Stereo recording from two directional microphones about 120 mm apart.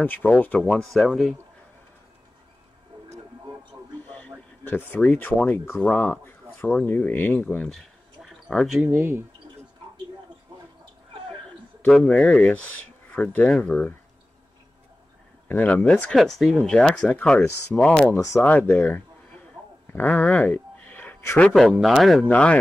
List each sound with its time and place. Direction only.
0.0 s speech: 15° left (ahead or behind)
4.1 s speech: 15° left (ahead or behind)
7.7 s a sound: 5° left (ahead or behind)
8.8 s speech: 20° right (ahead or behind)
11.9 s speech: 10° left (ahead or behind)
13.5 s speech: 5° left (ahead or behind)
15.4 s speech: 15° left (ahead or behind)
18.1 s speech: 25° left (ahead or behind); by 22.2 s centre (ahead or behind)
22.2 s speech: 10° left (ahead or behind)